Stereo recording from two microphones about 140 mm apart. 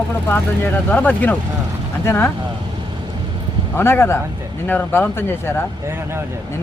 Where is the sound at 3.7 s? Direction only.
15° left (ahead or behind).